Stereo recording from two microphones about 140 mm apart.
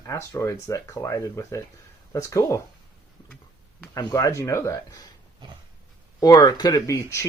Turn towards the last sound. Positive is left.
turn(degrees=20)  # may be behind; listen again after turning